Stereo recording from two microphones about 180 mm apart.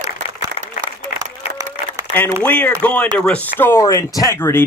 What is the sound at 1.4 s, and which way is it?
Applause, 20° right (ahead or behind).